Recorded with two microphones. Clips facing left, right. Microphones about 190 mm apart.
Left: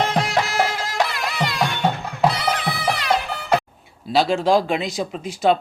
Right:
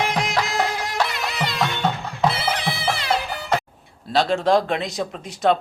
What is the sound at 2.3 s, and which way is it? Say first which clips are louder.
Music: left 1 dB; 25° right (ahead or behind).